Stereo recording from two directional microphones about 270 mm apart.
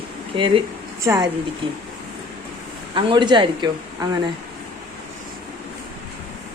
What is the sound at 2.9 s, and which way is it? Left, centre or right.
Speech, centre.